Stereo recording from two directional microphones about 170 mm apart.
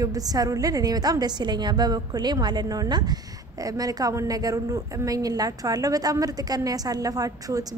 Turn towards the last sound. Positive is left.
turn(degrees=-20)  # may be behind; listen again after turning